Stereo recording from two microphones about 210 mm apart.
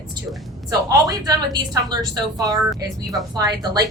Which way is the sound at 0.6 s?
15° right (ahead or behind).